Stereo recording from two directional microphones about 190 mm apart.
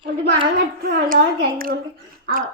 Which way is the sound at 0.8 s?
50° right (ahead or behind).